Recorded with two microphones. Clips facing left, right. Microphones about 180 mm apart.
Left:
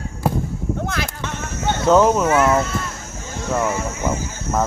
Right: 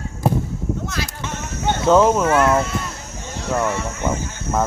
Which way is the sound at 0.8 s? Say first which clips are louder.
Left 2 dB; 55° left (ahead or behind).